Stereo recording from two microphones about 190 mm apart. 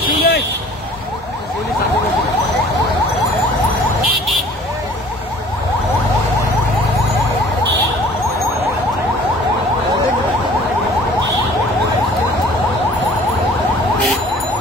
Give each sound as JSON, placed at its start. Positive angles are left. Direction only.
{"t": 0.0, "sound": "vehicle", "side_deg": 50}